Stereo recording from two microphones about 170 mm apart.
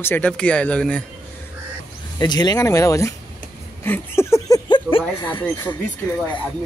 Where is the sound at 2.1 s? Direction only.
25° left (ahead or behind).